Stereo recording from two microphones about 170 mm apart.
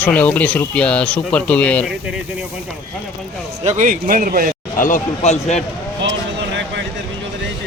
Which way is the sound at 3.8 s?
50° right (ahead or behind).